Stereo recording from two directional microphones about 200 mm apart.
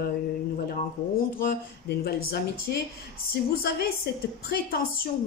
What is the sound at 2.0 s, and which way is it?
Speech, 50° left (ahead or behind).